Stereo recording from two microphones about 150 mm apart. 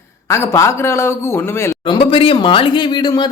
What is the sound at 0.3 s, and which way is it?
A man's voice, 20° left (ahead or behind).